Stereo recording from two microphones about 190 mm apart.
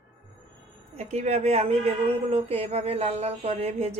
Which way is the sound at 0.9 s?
35° right (ahead or behind).